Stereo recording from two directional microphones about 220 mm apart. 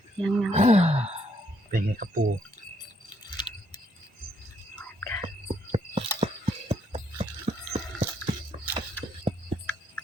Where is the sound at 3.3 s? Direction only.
20° left (ahead or behind).